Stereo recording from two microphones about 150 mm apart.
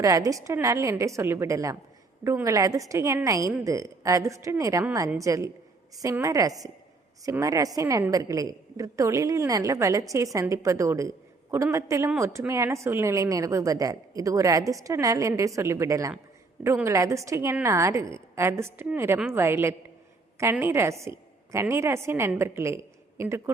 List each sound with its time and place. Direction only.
0.0 s a woman's voice: 20° right (ahead or behind)